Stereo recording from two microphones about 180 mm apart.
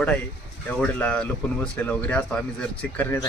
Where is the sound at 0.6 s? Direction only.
5° left (ahead or behind).